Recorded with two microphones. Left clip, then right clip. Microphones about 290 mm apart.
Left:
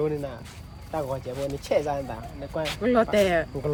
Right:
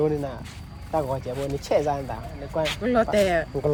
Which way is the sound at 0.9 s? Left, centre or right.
Centre.